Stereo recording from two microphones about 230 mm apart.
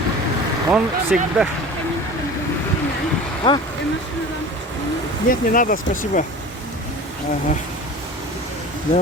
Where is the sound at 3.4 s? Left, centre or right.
Centre.